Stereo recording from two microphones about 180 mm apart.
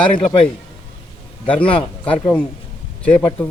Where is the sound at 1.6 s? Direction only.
5° left (ahead or behind).